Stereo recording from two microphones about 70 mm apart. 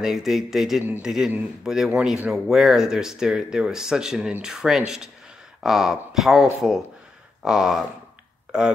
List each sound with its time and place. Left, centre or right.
0.0 s speech: centre
1.9 s speech: centre
2.2 s speech: centre